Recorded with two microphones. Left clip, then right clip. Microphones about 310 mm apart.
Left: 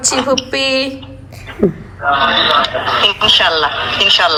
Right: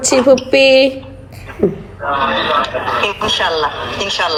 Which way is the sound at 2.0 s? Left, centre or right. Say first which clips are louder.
Left 3 dB; centre.